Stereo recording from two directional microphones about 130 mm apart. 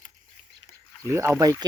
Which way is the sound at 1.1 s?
20° right (ahead or behind).